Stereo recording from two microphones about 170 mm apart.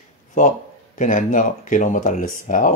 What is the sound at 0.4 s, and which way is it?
Speech, 50° left (ahead or behind).